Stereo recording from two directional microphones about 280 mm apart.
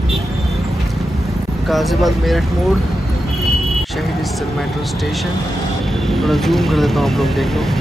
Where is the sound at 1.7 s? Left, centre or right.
Centre.